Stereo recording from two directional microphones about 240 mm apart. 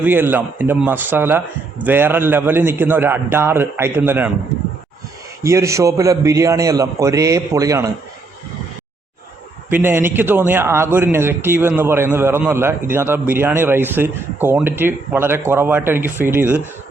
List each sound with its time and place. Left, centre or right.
0.0 s a man's voice: centre
5.4 s a man's voice: centre
9.6 s a man's voice: centre